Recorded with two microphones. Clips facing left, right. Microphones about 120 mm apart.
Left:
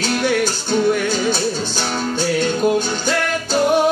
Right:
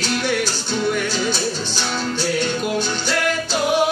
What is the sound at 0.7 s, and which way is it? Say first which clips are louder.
Music: left 5 dB; 50° left (ahead or behind).